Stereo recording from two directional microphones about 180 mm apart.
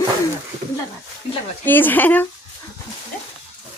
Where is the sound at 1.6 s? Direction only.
10° left (ahead or behind).